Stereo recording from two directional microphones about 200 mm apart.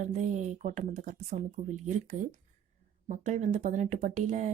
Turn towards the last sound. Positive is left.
turn(degrees=-35)  # may be behind; listen again after turning